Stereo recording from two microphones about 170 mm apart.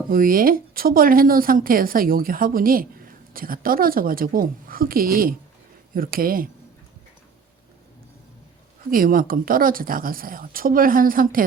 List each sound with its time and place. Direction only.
0.1 s a woman's voice: 55° right (ahead or behind)
8.9 s a woman's voice: 55° right (ahead or behind)